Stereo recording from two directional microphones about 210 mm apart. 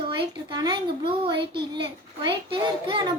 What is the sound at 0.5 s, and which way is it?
A child's voice, 20° right (ahead or behind).